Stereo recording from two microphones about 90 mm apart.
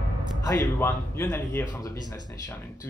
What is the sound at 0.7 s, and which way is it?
Speech, 25° left (ahead or behind).